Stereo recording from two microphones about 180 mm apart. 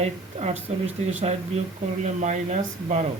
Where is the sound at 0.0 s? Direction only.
40° right (ahead or behind).